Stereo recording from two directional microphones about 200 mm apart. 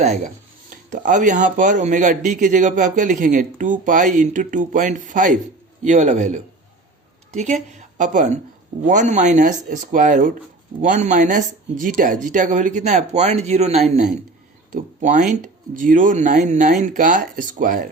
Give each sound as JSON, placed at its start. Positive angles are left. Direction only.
{"t": 0.0, "sound": "a woman's voice", "side_deg": -35}